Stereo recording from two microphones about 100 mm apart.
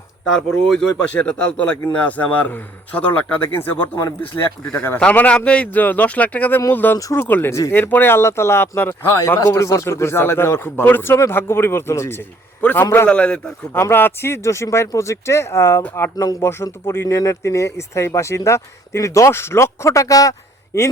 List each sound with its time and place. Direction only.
0.7 s a man's voice: 5° left (ahead or behind); by 4.9 s 25° left (ahead or behind)
4.9 s a man's voice: 10° left (ahead or behind)
7.5 s speech: 30° left (ahead or behind)
7.8 s a man's voice: 20° left (ahead or behind)
13.7 s speech: 20° left (ahead or behind)
15.8 s a man's voice: 15° left (ahead or behind)
16.1 s speech: 35° left (ahead or behind)